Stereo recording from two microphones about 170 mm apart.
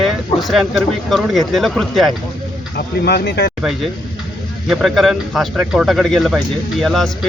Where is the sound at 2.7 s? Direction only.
75° left (ahead or behind).